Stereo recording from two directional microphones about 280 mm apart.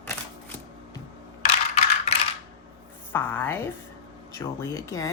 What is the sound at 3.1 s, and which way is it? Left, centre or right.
Speech, centre.